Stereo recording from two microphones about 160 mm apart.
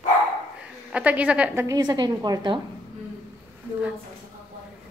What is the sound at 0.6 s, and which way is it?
A woman's voice, 10° right (ahead or behind).